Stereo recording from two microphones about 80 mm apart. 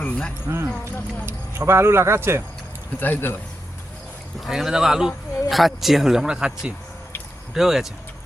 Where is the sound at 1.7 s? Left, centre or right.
Right.